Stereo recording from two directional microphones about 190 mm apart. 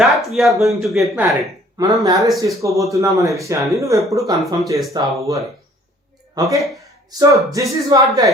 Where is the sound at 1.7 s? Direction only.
20° right (ahead or behind).